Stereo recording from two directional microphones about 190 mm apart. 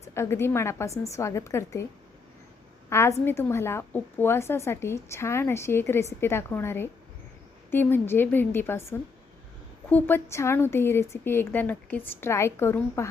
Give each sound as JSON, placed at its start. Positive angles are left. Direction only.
{"t": 0.0, "sound": "a woman's voice", "side_deg": 15}
{"t": 2.9, "sound": "a woman's voice", "side_deg": 15}